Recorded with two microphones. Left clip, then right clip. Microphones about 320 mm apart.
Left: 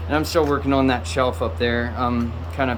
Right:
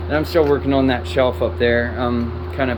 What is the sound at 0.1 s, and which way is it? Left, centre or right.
Speech, centre.